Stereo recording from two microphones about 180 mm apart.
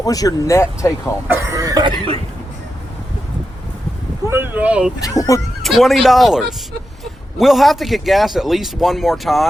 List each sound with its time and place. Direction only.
0.0 s speech: 20° left (ahead or behind)
1.3 s cough: 15° right (ahead or behind)
4.3 s speech: 10° right (ahead or behind)
4.9 s speech: 20° left (ahead or behind)
5.6 s a man's voice: centre (ahead or behind)